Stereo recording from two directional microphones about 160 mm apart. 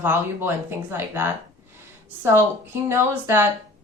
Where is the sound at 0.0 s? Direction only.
10° right (ahead or behind).